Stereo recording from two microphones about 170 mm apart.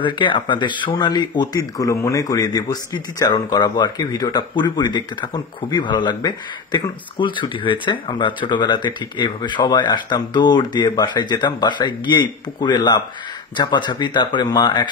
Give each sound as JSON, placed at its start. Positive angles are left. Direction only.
{"t": 0.0, "sound": "speech", "side_deg": 30}